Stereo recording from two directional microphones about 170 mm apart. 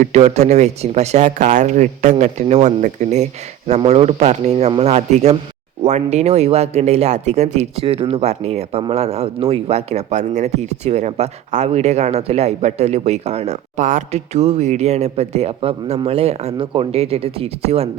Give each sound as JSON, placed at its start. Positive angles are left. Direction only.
{"t": 0.0, "sound": "speech", "side_deg": -40}